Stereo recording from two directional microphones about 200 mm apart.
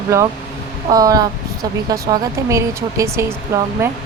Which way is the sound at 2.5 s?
15° right (ahead or behind).